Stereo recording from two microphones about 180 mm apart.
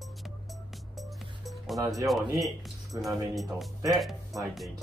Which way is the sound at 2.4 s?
Centre (ahead or behind).